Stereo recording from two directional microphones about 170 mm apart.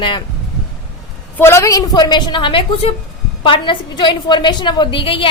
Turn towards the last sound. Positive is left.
turn(degrees=30)  # may be behind; listen again after turning